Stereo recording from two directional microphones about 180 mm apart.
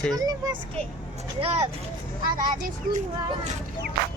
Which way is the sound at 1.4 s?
35° right (ahead or behind).